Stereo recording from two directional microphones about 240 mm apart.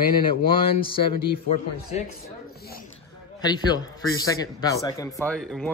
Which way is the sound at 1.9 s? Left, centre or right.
Left.